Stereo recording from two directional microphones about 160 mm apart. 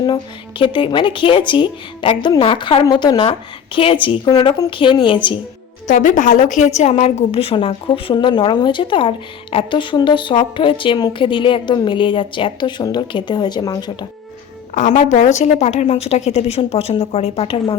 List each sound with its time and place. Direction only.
0.6 s a woman's voice: 30° left (ahead or behind)
5.9 s a woman's voice: 50° left (ahead or behind); by 13.9 s 25° left (ahead or behind)
14.8 s a woman's voice: 50° left (ahead or behind)